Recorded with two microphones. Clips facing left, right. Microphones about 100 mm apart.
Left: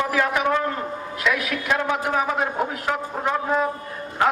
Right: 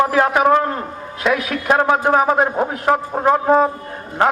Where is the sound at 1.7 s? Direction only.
50° right (ahead or behind).